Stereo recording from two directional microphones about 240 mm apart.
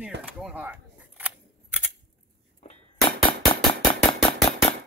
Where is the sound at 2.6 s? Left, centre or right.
Left.